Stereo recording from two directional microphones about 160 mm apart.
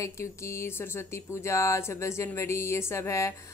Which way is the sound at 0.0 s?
15° left (ahead or behind).